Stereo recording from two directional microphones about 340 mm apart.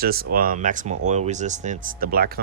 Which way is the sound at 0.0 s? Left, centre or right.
Right.